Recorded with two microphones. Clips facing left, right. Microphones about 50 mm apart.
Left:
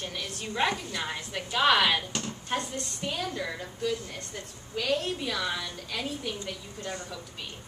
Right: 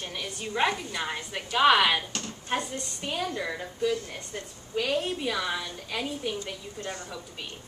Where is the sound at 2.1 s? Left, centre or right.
Centre.